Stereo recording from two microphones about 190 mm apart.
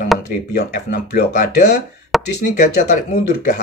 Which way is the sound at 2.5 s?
40° left (ahead or behind).